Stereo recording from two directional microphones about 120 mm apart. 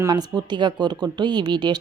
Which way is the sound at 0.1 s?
35° right (ahead or behind).